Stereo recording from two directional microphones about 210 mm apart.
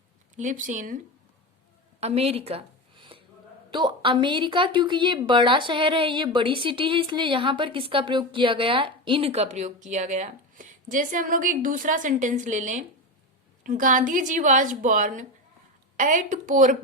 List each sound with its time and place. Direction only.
0.3 s speech: 35° right (ahead or behind)
2.0 s a sound: 30° right (ahead or behind)
3.7 s a woman's voice: 20° right (ahead or behind); by 16.7 s 35° right (ahead or behind)